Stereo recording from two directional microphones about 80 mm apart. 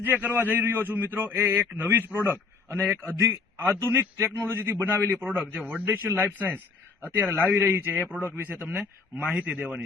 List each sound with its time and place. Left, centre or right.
0.0 s a man's voice: right
5.5 s a man's voice: centre
6.1 s a man's voice: right; by 9.8 s centre